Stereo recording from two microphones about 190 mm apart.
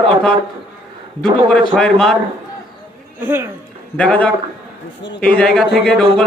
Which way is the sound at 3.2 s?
10° right (ahead or behind).